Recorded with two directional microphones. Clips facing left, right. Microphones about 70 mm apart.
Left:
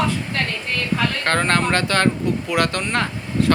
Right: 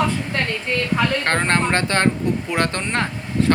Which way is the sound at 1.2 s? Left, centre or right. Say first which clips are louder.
Even; right.